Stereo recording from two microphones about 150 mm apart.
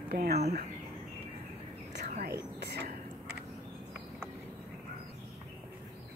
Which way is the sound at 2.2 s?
90° right.